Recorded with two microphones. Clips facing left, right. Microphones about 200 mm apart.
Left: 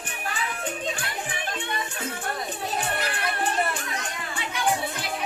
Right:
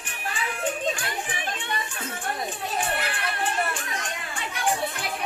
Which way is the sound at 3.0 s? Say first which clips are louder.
Left 1 dB; 40° left (ahead or behind).